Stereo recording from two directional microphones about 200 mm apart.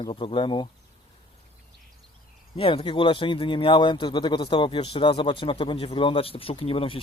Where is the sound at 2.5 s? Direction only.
30° left (ahead or behind).